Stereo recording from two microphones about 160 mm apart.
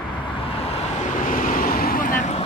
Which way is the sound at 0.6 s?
40° left (ahead or behind).